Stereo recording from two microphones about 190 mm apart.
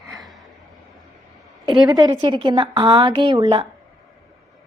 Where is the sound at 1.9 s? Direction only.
20° right (ahead or behind).